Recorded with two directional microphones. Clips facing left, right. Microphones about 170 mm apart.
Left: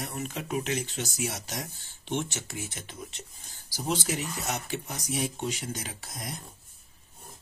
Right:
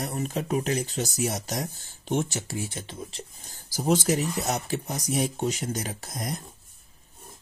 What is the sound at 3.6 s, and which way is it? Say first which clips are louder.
Speech: right 7 dB; 50° right (ahead or behind).